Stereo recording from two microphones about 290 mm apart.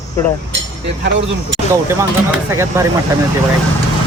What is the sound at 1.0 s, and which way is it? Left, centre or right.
Speech, right.